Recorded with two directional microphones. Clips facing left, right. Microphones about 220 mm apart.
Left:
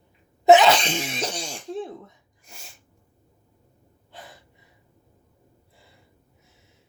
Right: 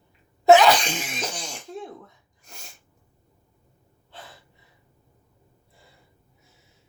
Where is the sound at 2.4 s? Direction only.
5° left (ahead or behind).